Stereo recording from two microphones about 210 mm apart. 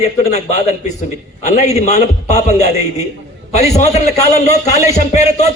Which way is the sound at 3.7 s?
30° left (ahead or behind).